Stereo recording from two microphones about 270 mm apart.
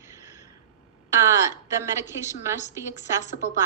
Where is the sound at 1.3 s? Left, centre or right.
Centre.